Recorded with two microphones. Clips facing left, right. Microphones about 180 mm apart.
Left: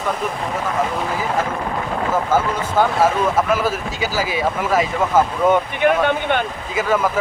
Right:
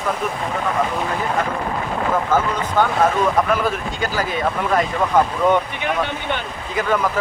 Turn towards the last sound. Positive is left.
turn(degrees=5)  # may be behind; listen again after turning